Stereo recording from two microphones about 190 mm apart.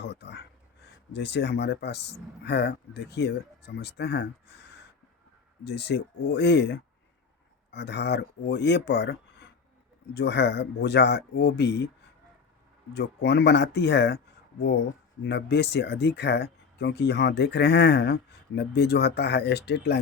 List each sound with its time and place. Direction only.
0.0 s a sound: 60° left (ahead or behind)
1.1 s speech: 65° left (ahead or behind)
12.9 s speech: 60° left (ahead or behind)
15.2 s speech: 60° left (ahead or behind)